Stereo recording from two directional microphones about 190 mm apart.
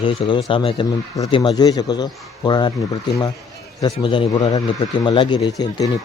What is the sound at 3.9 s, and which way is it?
Speech, 25° left (ahead or behind).